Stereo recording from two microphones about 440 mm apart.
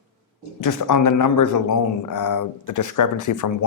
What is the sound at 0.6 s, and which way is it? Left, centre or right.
Speech, left.